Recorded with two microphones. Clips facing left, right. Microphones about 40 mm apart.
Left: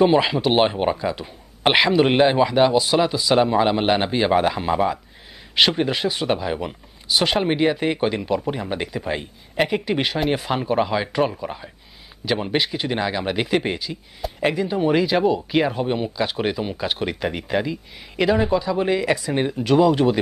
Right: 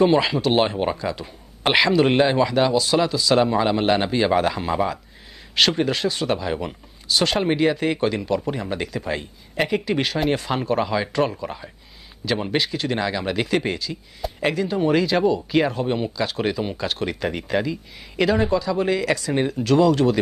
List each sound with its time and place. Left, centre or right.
0.0 s speech: centre
14.2 s speech: centre